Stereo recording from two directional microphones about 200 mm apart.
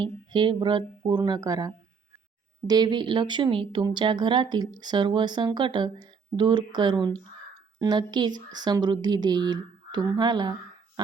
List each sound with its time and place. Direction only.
0.0 s speech: 25° right (ahead or behind)